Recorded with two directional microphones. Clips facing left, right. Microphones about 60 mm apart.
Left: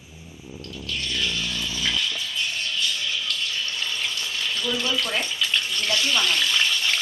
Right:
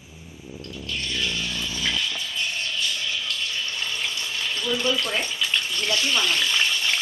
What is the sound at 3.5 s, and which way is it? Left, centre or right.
Water, centre.